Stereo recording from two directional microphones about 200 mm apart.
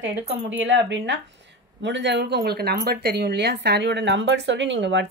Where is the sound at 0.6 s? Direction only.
65° right (ahead or behind).